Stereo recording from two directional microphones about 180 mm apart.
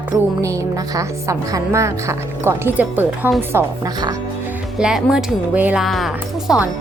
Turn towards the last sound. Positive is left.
turn(degrees=0)  # may be behind; listen again after turning